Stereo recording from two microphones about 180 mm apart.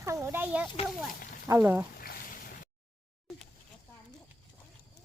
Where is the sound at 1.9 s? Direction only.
55° left (ahead or behind).